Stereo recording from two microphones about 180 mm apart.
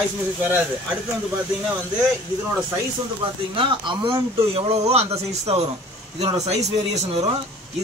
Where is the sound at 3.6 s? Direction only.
30° right (ahead or behind).